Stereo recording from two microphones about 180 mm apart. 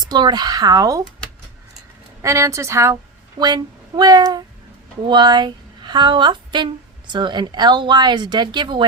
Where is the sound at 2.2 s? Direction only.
15° right (ahead or behind).